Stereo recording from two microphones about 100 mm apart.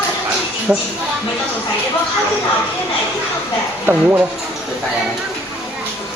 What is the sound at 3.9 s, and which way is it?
Speech, 20° right (ahead or behind).